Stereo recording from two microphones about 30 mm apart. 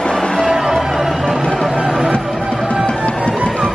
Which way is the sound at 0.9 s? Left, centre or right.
Centre.